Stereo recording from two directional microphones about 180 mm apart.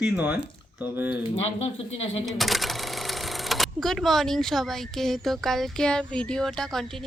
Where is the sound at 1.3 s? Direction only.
35° left (ahead or behind).